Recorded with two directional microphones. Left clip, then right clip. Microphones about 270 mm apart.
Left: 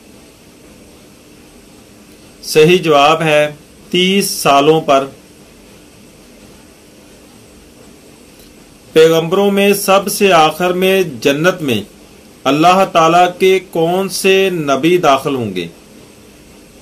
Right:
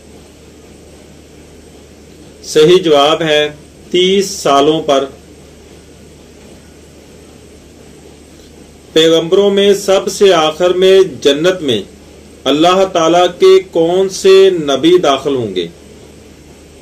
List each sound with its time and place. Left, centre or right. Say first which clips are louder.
2.5 s mantra: right 1 dB; left
8.9 s mantra: even; left